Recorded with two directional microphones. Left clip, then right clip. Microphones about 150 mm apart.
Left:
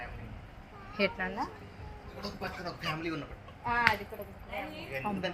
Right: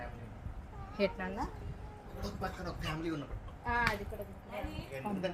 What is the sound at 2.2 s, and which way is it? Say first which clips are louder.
Speech: left 2 dB; 40° right (ahead or behind).